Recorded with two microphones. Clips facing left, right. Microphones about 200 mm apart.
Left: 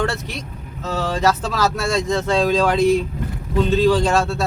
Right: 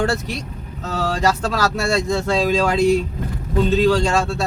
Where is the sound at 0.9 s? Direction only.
Centre (ahead or behind).